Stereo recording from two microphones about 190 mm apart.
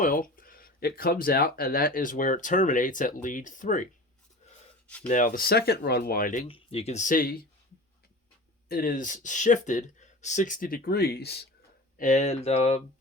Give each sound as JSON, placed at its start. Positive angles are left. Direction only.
{"t": 0.0, "sound": "speech", "side_deg": 45}
{"t": 5.0, "sound": "speech", "side_deg": 45}
{"t": 6.5, "sound": "speech", "side_deg": 30}
{"t": 8.7, "sound": "speech", "side_deg": 45}
{"t": 11.9, "sound": "speech", "side_deg": 40}